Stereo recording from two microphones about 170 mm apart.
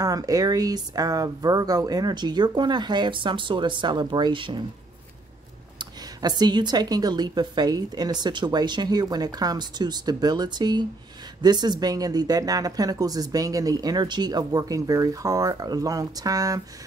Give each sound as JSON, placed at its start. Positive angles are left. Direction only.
{"t": 0.0, "sound": "speech", "side_deg": -20}
{"t": 5.8, "sound": "speech", "side_deg": -25}